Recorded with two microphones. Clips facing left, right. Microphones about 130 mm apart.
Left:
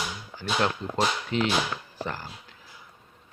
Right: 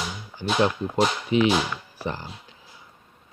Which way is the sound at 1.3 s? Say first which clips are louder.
Right 5 dB; 15° right (ahead or behind).